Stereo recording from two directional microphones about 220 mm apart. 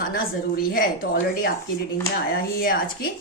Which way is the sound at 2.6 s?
40° left (ahead or behind).